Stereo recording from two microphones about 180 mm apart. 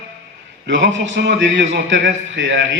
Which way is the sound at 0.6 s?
85° right.